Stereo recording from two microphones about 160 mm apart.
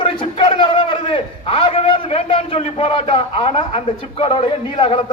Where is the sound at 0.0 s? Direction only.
30° left (ahead or behind).